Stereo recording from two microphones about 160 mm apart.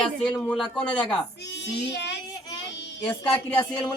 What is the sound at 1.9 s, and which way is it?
Speech, 90° left.